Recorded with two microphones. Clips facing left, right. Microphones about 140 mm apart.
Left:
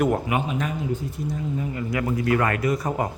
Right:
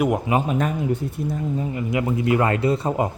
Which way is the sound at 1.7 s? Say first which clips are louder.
Right 2 dB; 20° right (ahead or behind).